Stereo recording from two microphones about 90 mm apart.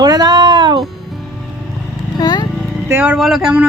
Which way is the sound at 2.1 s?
50° left (ahead or behind).